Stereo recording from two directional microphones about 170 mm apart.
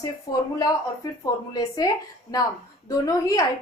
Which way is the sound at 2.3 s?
25° left (ahead or behind).